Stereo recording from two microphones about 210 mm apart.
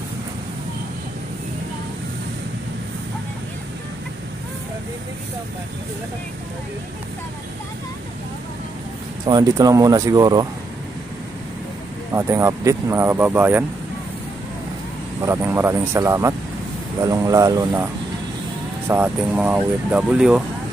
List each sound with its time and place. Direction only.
9.2 s speech: 20° right (ahead or behind)
12.1 s speech: 15° right (ahead or behind)
15.2 s speech: 10° right (ahead or behind)
18.9 s speech: 10° right (ahead or behind)